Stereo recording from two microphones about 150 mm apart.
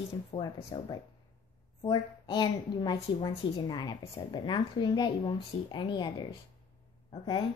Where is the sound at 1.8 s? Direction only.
30° left (ahead or behind).